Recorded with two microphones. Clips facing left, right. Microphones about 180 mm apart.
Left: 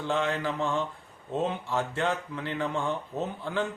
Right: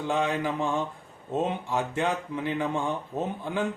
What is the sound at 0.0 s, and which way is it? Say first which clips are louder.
A man's voice: right 2 dB; 15° right (ahead or behind).